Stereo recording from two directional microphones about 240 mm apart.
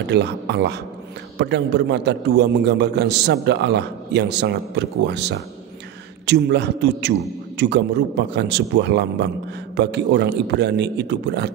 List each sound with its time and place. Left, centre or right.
0.1 s a man's voice: right